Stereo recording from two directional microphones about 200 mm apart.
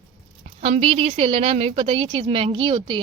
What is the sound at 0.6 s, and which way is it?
Speech, 30° right (ahead or behind).